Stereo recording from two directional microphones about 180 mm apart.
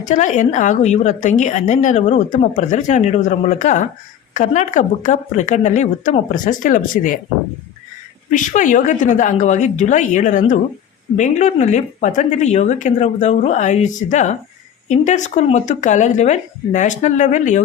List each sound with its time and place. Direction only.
0.0 s a woman's voice: 45° left (ahead or behind)
8.3 s a woman's voice: 45° left (ahead or behind)